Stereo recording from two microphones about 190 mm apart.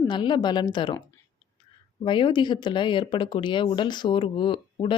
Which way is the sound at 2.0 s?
25° left (ahead or behind).